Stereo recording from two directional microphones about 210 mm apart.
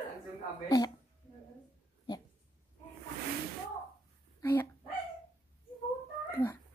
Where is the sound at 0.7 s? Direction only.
20° left (ahead or behind).